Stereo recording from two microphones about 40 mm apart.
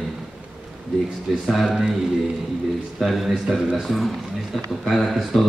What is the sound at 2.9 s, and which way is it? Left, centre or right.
A man's voice, centre.